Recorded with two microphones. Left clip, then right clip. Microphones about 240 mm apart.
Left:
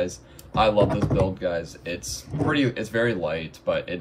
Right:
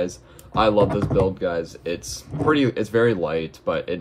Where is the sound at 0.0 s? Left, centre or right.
Right.